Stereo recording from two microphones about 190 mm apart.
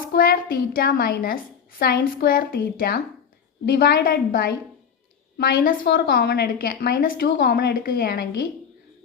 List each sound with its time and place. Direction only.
0.1 s a woman's voice: 50° left (ahead or behind)